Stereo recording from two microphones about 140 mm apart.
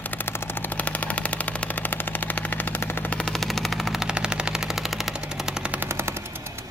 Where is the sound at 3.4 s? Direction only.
Centre (ahead or behind).